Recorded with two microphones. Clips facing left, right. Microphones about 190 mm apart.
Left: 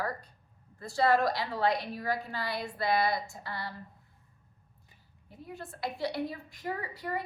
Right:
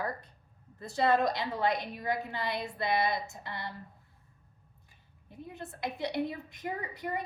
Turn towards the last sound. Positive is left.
turn(degrees=-20)  # may be behind; listen again after turning